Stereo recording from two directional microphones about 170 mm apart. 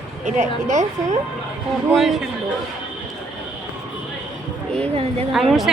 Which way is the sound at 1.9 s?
Centre (ahead or behind).